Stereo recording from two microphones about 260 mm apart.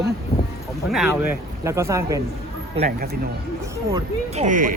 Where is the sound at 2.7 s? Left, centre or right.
Right.